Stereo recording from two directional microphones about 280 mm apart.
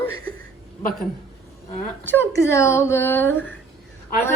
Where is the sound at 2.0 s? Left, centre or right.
Centre.